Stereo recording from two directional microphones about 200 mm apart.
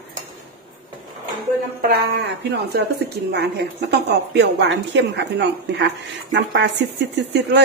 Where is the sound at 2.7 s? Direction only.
55° right (ahead or behind).